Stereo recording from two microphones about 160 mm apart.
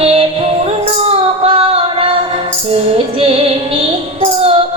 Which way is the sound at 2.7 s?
35° right (ahead or behind).